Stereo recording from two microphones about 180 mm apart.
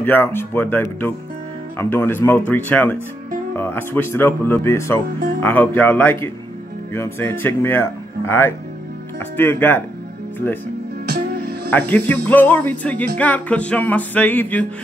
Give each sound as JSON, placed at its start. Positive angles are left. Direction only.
{"t": 0.0, "sound": "speech", "side_deg": 10}
{"t": 11.1, "sound": "music", "side_deg": -65}
{"t": 11.7, "sound": "speech", "side_deg": 10}